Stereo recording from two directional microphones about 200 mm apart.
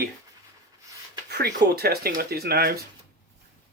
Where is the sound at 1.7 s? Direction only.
50° right (ahead or behind).